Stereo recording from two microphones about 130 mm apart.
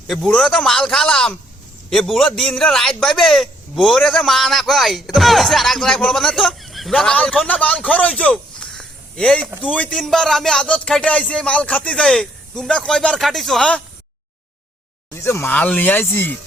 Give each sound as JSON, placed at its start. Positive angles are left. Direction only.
{"t": 0.1, "sound": "a man's voice", "side_deg": 5}
{"t": 9.5, "sound": "a man's voice", "side_deg": -10}
{"t": 9.7, "sound": "speech", "side_deg": 10}
{"t": 15.1, "sound": "speech", "side_deg": 20}